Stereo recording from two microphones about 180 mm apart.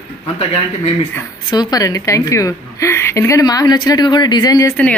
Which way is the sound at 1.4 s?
20° left (ahead or behind).